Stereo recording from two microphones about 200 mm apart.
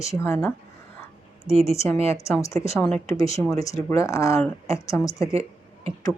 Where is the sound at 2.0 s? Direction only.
15° left (ahead or behind).